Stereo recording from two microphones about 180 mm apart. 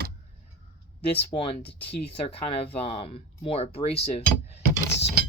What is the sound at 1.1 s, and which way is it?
Speech, 30° left (ahead or behind).